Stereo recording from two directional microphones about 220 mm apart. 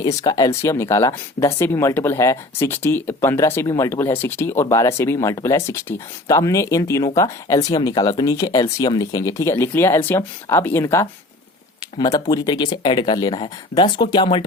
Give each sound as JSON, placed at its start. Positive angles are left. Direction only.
{"t": 0.0, "sound": "speech", "side_deg": 15}